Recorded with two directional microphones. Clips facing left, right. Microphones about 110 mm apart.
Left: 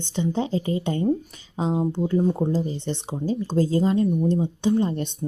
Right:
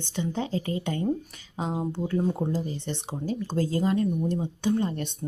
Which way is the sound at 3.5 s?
25° left (ahead or behind).